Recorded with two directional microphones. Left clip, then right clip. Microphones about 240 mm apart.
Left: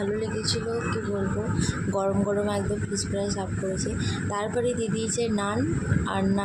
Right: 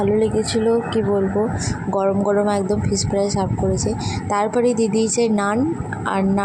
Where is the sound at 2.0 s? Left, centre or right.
Right.